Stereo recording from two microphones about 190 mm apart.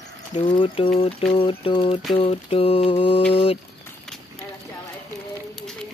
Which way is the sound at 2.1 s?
30° left (ahead or behind).